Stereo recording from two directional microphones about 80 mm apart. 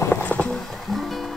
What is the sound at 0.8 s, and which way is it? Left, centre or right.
Music, centre.